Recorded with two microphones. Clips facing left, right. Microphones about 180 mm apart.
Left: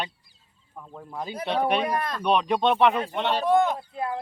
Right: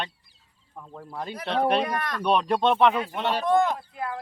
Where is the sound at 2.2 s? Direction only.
Centre (ahead or behind).